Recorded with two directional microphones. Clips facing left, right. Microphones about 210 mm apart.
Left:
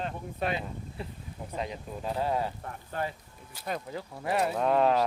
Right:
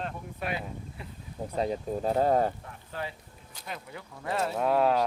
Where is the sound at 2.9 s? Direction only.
50° left (ahead or behind).